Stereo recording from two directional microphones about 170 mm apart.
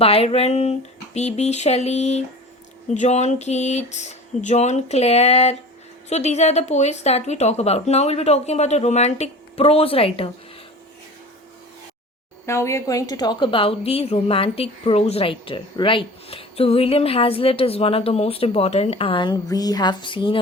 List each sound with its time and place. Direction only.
0.0 s a woman's voice: 35° left (ahead or behind)
12.5 s a woman's voice: 15° left (ahead or behind)